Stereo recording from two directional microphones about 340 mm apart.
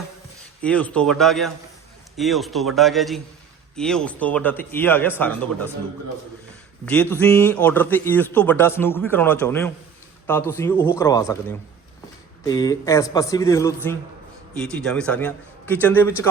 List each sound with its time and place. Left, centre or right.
0.6 s speech: centre
6.8 s speech: centre